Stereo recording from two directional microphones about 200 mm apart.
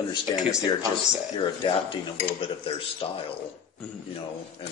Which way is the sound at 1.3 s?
25° left (ahead or behind).